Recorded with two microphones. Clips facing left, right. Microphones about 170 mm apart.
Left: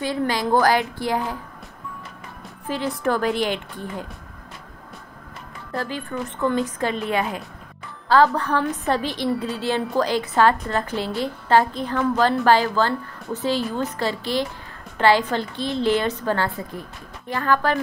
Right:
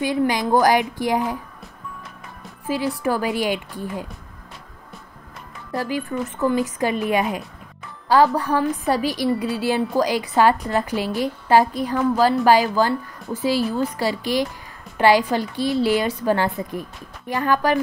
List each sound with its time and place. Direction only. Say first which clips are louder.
0.0 s a woman's voice: right 3 dB; 15° right (ahead or behind)
3.0 s a woman's voice: even; 10° right (ahead or behind)
5.7 s a woman's voice: right 3 dB; 10° right (ahead or behind)